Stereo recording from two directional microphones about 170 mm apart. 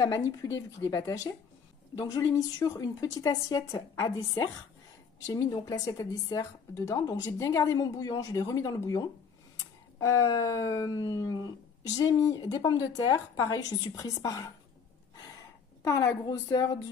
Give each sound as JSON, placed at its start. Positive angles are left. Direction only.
{"t": 0.0, "sound": "speech", "side_deg": 20}
{"t": 15.8, "sound": "speech", "side_deg": 20}